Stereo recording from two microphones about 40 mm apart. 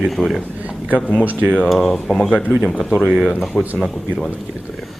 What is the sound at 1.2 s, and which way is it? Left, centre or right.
Speech, right.